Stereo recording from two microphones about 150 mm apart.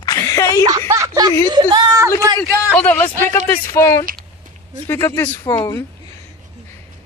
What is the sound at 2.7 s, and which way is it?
Speech, 10° left (ahead or behind).